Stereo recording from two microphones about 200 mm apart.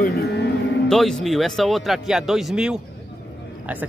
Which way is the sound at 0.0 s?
50° left (ahead or behind).